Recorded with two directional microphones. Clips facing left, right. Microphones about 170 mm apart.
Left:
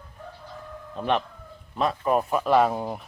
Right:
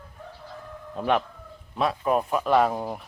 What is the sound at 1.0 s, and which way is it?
Speech, 10° right (ahead or behind).